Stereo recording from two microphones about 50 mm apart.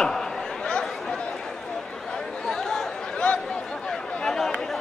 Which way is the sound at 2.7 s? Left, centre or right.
Centre.